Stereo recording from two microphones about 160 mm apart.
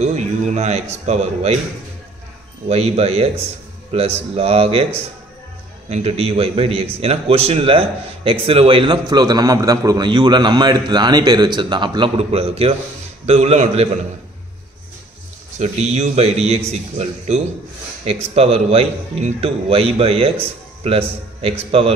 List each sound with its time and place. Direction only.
0.0 s a man's voice: 45° right (ahead or behind)
2.7 s a man's voice: 40° right (ahead or behind)
15.6 s a man's voice: 45° right (ahead or behind)